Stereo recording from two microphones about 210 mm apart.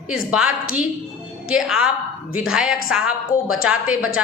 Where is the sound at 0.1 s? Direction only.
5° right (ahead or behind).